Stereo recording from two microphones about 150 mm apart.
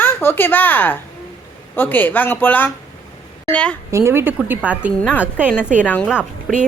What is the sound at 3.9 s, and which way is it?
A woman's voice, 15° right (ahead or behind).